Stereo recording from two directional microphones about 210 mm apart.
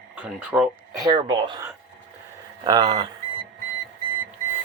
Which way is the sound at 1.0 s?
20° right (ahead or behind).